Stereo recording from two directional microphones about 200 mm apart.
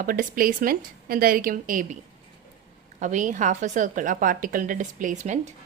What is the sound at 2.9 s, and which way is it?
A woman's voice, 40° right (ahead or behind).